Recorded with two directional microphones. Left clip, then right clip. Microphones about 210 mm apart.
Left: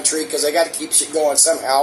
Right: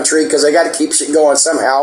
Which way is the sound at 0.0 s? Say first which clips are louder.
Right 9 dB; 50° right (ahead or behind).